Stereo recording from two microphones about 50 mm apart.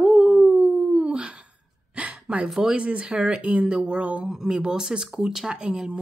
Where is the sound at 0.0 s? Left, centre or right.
Centre.